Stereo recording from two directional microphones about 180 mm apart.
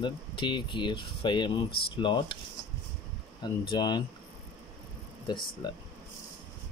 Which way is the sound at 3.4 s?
25° left (ahead or behind).